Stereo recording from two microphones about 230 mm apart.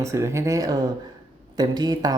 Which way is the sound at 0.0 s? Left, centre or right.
Centre.